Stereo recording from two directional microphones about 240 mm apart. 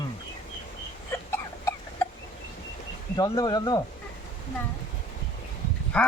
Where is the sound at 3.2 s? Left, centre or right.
Centre.